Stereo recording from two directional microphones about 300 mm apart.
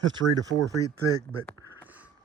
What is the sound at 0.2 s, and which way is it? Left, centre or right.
Speech, right.